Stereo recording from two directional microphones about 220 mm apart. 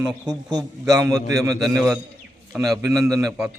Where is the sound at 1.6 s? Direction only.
Centre (ahead or behind).